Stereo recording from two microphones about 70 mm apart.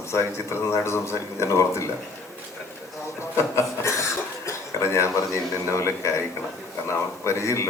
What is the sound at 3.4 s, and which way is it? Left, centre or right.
Chuckle, left.